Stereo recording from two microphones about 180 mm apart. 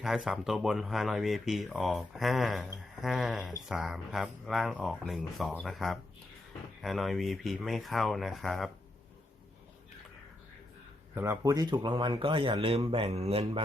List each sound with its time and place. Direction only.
0.0 s speech: centre (ahead or behind)
11.1 s speech: 15° right (ahead or behind); by 13.6 s 35° right (ahead or behind)